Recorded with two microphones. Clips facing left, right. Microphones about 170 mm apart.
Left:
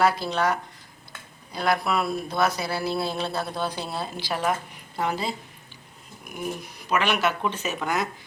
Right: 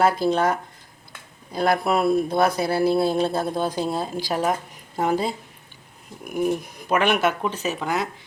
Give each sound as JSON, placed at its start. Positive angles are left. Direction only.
{"t": 0.0, "sound": "speech", "side_deg": -50}
{"t": 1.5, "sound": "speech", "side_deg": -50}
{"t": 7.5, "sound": "speech", "side_deg": -35}